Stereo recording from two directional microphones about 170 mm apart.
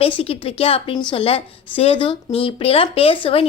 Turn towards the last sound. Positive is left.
turn(degrees=35)  # may be behind; listen again after turning